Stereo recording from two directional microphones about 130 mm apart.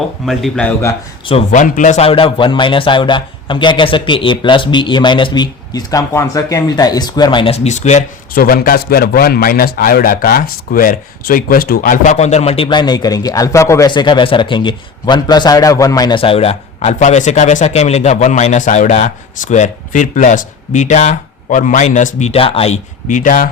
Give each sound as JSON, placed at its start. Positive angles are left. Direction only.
{"t": 0.3, "sound": "a man's voice", "side_deg": 5}
{"t": 1.5, "sound": "speech", "side_deg": 80}
{"t": 2.0, "sound": "a man's voice", "side_deg": 45}
{"t": 7.5, "sound": "speech", "side_deg": 60}
{"t": 9.4, "sound": "a man's voice", "side_deg": 90}
{"t": 13.9, "sound": "a man's voice", "side_deg": 35}
{"t": 16.1, "sound": "speech", "side_deg": 45}
{"t": 22.4, "sound": "a man's voice", "side_deg": 45}
{"t": 23.0, "sound": "speech", "side_deg": 80}